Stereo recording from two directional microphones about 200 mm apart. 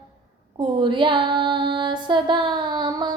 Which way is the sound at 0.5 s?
25° right (ahead or behind).